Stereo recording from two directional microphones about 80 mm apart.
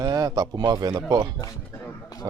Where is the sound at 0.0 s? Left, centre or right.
Right.